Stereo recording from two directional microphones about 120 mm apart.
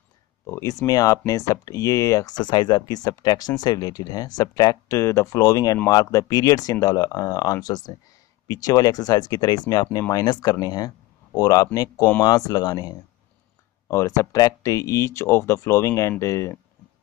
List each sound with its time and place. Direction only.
0.5 s speech: 25° left (ahead or behind)